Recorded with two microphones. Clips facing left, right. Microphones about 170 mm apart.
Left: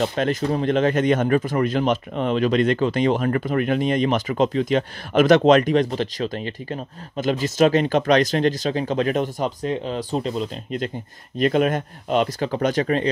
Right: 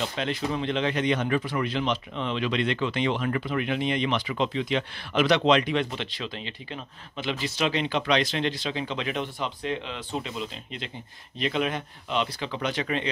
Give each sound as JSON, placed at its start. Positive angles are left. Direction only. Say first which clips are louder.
{"t": 0.0, "sound": "speech", "louder": "left 7 dB", "side_deg": 50}